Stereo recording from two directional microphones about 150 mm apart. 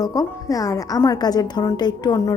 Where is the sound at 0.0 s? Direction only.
25° left (ahead or behind).